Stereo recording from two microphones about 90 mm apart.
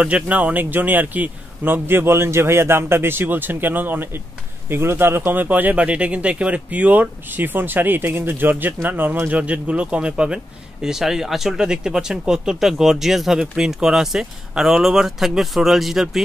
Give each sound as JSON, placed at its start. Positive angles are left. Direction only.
{"t": 0.0, "sound": "speech", "side_deg": -15}